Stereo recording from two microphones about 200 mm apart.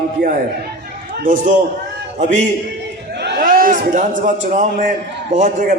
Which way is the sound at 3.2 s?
50° right (ahead or behind).